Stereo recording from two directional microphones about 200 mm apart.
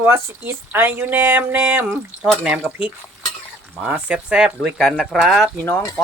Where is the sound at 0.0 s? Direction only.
10° right (ahead or behind).